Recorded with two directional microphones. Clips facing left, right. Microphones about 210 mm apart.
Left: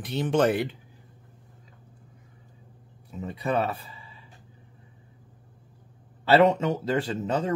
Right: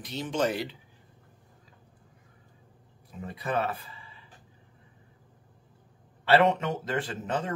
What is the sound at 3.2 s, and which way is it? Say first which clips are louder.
Speech: left 4 dB; 30° left (ahead or behind).